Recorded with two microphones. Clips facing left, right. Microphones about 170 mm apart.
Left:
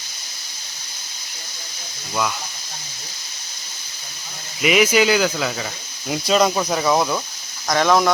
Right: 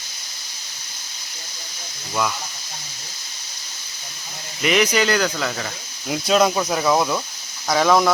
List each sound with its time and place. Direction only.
4.6 s speech: 5° left (ahead or behind)